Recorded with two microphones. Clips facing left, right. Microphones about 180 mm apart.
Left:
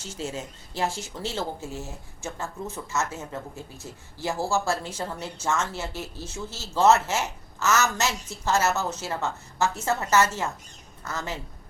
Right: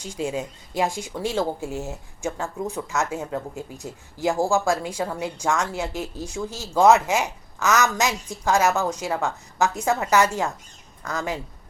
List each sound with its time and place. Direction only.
0.0 s speech: 15° right (ahead or behind)